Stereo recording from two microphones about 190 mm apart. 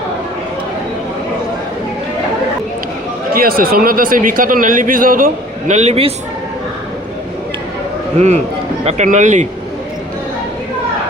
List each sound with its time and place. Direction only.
3.3 s speech: 50° right (ahead or behind); by 6.1 s 35° right (ahead or behind)
8.8 s speech: 35° right (ahead or behind)